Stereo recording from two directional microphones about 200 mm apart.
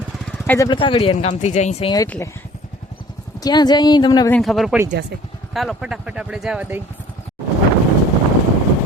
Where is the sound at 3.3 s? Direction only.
20° left (ahead or behind).